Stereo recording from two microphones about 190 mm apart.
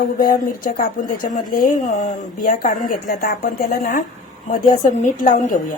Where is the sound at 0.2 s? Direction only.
50° left (ahead or behind).